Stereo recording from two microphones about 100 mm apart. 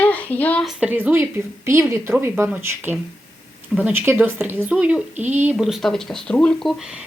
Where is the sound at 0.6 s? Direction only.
5° right (ahead or behind).